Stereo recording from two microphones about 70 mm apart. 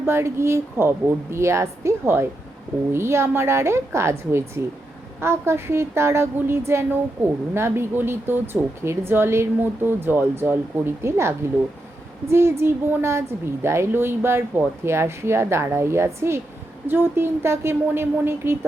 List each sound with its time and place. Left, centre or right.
0.0 s a woman's voice: right